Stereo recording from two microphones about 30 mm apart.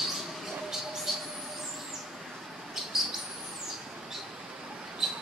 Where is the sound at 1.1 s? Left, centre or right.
Centre.